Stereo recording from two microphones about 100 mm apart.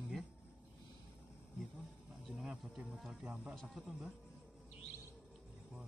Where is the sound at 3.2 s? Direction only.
15° right (ahead or behind).